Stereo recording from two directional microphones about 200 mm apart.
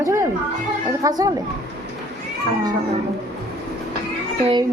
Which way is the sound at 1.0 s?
20° right (ahead or behind).